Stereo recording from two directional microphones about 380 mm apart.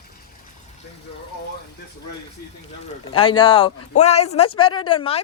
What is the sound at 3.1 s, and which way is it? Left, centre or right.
Speech, centre.